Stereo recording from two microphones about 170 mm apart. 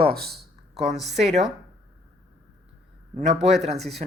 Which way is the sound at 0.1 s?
65° right (ahead or behind).